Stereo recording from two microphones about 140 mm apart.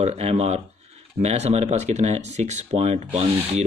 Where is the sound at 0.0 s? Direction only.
50° right (ahead or behind).